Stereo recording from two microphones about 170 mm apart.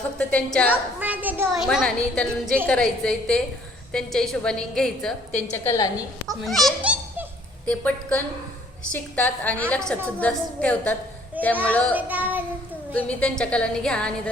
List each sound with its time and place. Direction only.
0.2 s a woman's voice: 5° left (ahead or behind)
0.7 s a woman's voice: 10° right (ahead or behind)
5.6 s a woman's voice: 20° left (ahead or behind)
6.2 s a woman's voice: centre (ahead or behind)
11.9 s child singing: 10° right (ahead or behind)
12.9 s a woman's voice: 5° left (ahead or behind)